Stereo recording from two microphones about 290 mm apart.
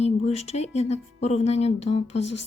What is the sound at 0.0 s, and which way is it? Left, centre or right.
Speech, left.